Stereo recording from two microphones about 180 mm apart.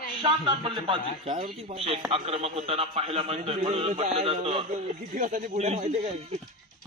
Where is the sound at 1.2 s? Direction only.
40° right (ahead or behind).